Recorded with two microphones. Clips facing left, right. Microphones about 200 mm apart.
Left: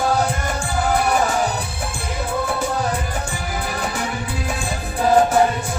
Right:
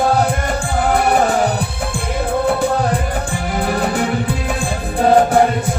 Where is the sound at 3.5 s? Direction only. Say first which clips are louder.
Right 9 dB; 55° right (ahead or behind).